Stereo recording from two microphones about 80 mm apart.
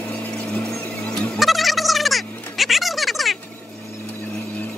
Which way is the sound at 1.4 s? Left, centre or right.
Centre.